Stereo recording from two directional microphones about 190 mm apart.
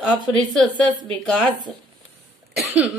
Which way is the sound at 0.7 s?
25° right (ahead or behind).